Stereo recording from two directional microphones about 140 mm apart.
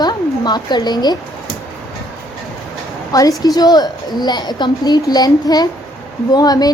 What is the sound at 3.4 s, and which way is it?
A woman's voice, 30° left (ahead or behind).